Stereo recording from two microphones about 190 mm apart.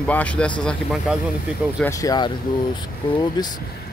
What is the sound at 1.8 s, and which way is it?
Speech, 15° left (ahead or behind).